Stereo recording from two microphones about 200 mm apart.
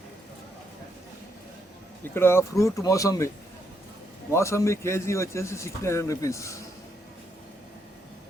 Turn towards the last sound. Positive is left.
turn(degrees=15)  # may be behind; listen again after turning